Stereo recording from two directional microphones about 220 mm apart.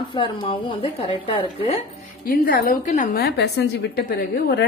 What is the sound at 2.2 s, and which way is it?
A woman's voice, 40° left (ahead or behind).